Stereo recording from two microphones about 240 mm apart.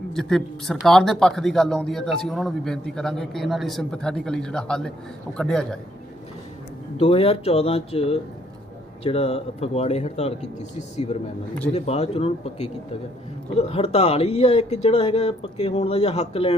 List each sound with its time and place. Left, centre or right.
0.1 s speech: centre
7.0 s speech: left